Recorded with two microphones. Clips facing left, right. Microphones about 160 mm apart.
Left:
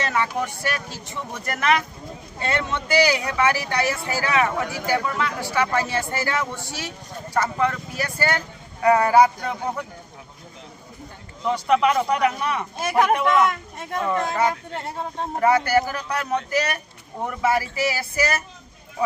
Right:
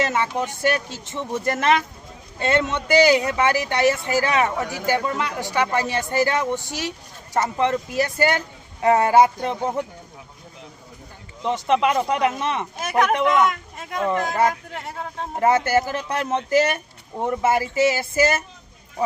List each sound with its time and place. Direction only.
0.0 s speech: 20° right (ahead or behind)
11.4 s speech: 20° right (ahead or behind)
13.4 s speech: centre (ahead or behind)
15.4 s speech: 25° right (ahead or behind)